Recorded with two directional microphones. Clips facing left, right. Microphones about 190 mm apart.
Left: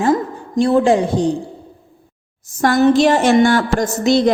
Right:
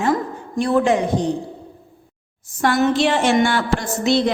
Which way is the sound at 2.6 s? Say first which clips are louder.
Left 5 dB; 40° left (ahead or behind).